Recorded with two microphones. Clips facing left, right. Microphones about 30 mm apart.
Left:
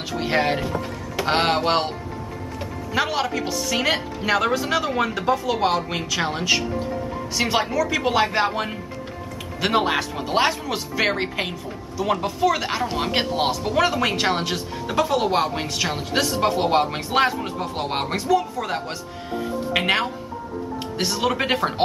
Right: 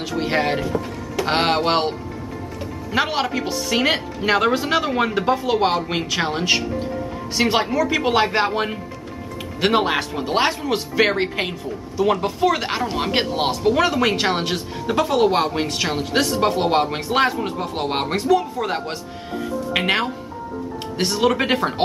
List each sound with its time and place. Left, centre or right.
0.1 s speech: centre
0.7 s music: centre
1.2 s speech: centre